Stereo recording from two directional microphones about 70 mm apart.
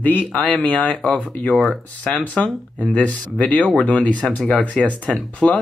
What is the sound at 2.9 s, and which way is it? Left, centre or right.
Speech, centre.